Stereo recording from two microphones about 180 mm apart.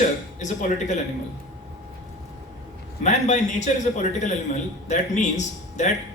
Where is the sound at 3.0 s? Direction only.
40° left (ahead or behind).